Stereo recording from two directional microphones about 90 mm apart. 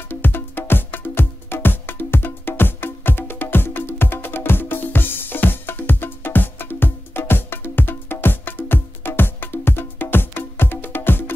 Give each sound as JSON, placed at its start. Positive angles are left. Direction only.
{"t": 0.1, "sound": "music", "side_deg": 25}